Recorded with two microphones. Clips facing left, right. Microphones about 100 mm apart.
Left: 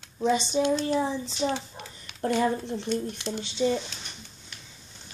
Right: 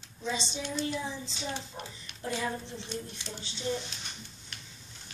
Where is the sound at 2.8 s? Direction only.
80° left.